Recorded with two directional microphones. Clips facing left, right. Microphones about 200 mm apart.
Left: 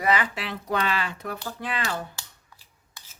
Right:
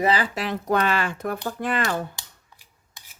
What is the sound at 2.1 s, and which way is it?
Scissors, 15° right (ahead or behind).